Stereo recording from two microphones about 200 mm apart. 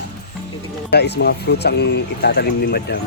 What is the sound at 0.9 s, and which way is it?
Speech, 55° left (ahead or behind).